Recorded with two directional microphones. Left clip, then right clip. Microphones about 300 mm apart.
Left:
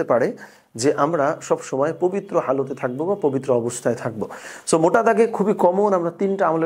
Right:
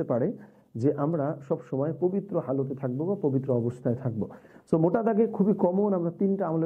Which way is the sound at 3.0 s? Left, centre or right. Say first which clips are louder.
Left 7 dB; left.